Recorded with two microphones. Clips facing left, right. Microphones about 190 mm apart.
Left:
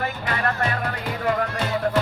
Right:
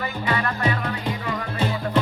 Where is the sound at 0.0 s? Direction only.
50° left (ahead or behind).